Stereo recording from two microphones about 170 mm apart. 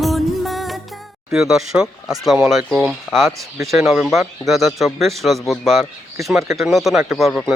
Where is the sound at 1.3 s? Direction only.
5° right (ahead or behind).